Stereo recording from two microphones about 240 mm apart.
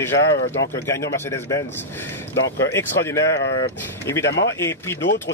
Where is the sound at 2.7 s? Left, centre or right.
Centre.